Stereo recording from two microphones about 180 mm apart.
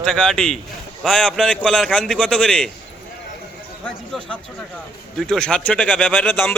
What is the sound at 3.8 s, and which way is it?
A man's voice, 5° left (ahead or behind).